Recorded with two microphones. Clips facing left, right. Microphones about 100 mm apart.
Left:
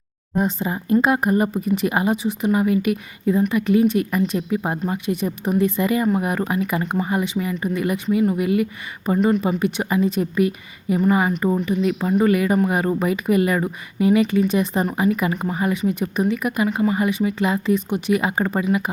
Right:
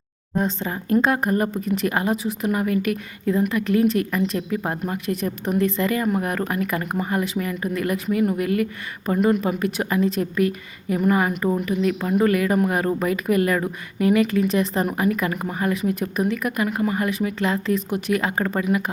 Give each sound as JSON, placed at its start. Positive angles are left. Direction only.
{"t": 0.3, "sound": "speech", "side_deg": 5}